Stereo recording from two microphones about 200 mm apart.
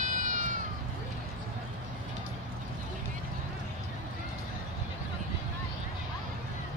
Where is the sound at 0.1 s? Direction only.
40° right (ahead or behind).